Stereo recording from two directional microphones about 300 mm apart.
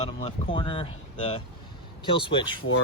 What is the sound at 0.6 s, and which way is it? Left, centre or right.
Speech, centre.